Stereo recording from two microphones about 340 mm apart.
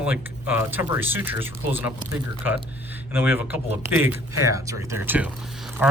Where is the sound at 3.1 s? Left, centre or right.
Centre.